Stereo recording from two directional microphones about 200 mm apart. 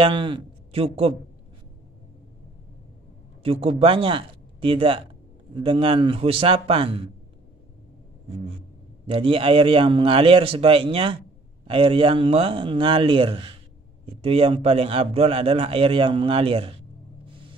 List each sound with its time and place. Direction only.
0.0 s a man's voice: 25° right (ahead or behind)
3.4 s a man's voice: 30° right (ahead or behind)
9.0 s a man's voice: 25° right (ahead or behind)